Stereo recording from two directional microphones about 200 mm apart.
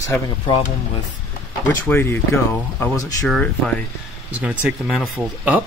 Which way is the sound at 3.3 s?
5° left (ahead or behind).